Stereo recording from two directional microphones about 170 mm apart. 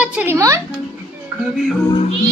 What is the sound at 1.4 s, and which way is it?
Music, centre (ahead or behind).